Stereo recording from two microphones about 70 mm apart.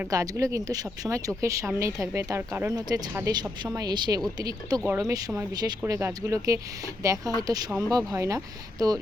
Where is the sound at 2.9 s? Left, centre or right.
Right.